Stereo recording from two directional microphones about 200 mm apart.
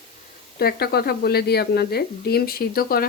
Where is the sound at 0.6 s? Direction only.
50° left (ahead or behind).